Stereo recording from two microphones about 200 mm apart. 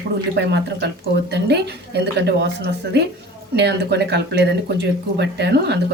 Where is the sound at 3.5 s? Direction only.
60° right (ahead or behind).